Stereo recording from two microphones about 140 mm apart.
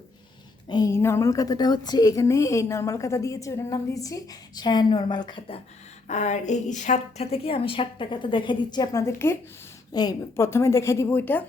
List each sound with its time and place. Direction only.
0.7 s a woman's voice: 25° left (ahead or behind)
6.1 s a woman's voice: 60° left (ahead or behind); by 11.4 s 15° left (ahead or behind)